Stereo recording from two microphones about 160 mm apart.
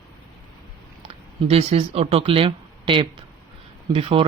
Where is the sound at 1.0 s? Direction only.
40° right (ahead or behind).